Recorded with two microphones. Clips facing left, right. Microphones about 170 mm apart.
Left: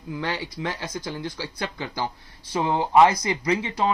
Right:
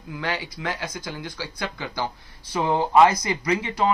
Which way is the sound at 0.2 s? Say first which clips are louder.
Right 1 dB; 25° left (ahead or behind).